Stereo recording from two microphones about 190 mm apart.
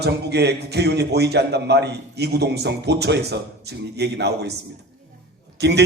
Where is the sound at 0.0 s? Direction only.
60° right (ahead or behind).